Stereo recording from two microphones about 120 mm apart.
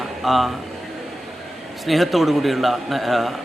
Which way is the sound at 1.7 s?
Centre (ahead or behind).